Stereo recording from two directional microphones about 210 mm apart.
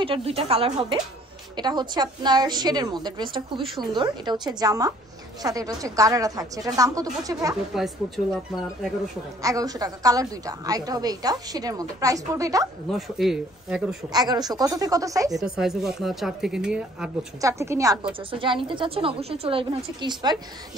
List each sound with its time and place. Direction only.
0.0 s a woman's voice: 25° right (ahead or behind)
7.7 s speech: centre (ahead or behind)
9.4 s a woman's voice: 15° right (ahead or behind)
12.9 s speech: centre (ahead or behind)
14.1 s a woman's voice: 20° right (ahead or behind)
15.3 s speech: 5° right (ahead or behind)
17.4 s a woman's voice: 15° right (ahead or behind)
18.3 s a woman's voice: 25° right (ahead or behind)